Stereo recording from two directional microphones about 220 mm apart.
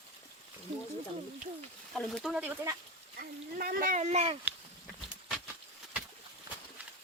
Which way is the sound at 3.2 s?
40° right (ahead or behind).